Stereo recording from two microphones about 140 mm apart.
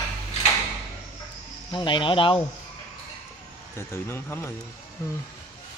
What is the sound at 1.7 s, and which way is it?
Speech, 35° left (ahead or behind).